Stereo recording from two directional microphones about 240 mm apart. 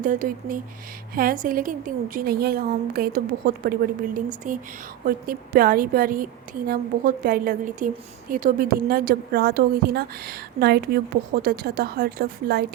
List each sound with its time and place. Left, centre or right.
0.0 s a woman's voice: right